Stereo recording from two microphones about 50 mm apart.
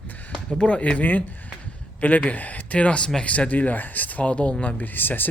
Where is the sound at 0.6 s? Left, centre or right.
Left.